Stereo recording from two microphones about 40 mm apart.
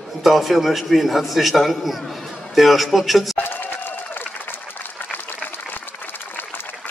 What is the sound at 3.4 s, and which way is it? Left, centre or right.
Applause, left.